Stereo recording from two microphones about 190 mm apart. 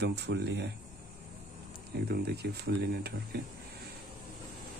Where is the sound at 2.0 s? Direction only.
60° right (ahead or behind).